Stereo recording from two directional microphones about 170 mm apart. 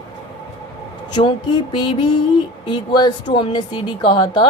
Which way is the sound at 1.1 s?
25° left (ahead or behind).